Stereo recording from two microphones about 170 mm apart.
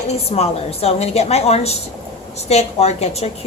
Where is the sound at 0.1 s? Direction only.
35° left (ahead or behind).